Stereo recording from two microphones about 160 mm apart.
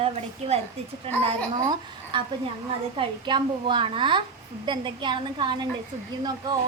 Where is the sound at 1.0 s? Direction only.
35° right (ahead or behind).